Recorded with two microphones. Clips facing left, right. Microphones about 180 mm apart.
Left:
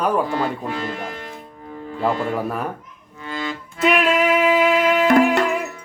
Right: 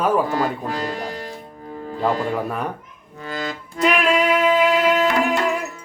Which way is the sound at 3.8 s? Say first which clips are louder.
Left 1 dB; 5° left (ahead or behind).